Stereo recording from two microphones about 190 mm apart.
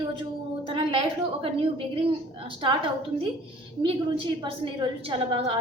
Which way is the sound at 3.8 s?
30° right (ahead or behind).